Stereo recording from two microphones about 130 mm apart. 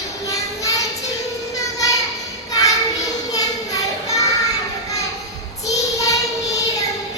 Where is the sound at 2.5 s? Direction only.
25° left (ahead or behind).